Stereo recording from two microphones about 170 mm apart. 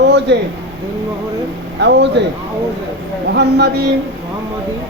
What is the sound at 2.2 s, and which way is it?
Speech, 90° right.